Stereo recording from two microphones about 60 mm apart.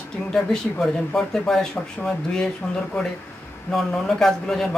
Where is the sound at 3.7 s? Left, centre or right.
Centre.